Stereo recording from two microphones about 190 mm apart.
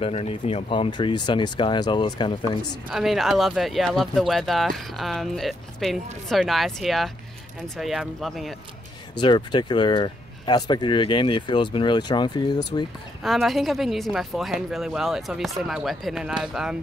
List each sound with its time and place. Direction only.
0.0 s speech: 30° left (ahead or behind)
2.9 s speech: centre (ahead or behind)
9.1 s speech: 25° left (ahead or behind)
13.2 s speech: centre (ahead or behind)